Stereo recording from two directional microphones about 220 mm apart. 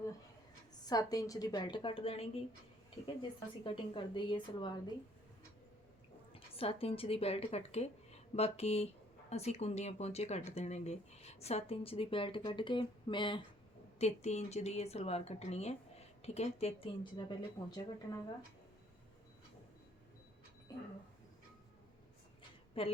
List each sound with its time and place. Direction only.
0.7 s speech: 15° left (ahead or behind)
6.5 s speech: 25° left (ahead or behind)
20.7 s speech: 15° left (ahead or behind)
22.8 s a woman's voice: 25° left (ahead or behind)